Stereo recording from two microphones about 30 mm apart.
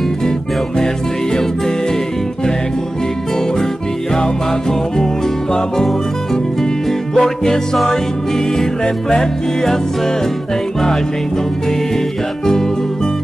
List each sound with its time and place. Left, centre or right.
4.1 s music: left
7.2 s music: centre